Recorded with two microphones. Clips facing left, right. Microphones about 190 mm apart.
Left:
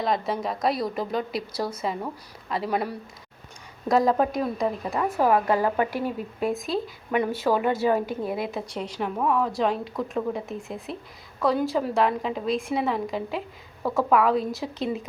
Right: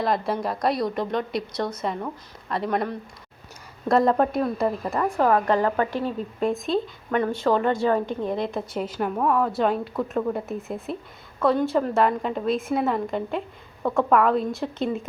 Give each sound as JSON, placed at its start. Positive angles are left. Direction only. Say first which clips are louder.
{"t": 0.0, "sound": "a woman's voice", "louder": "right 2 dB", "side_deg": 0}